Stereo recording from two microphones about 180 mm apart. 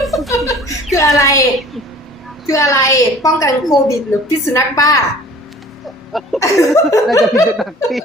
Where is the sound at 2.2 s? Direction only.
Centre (ahead or behind).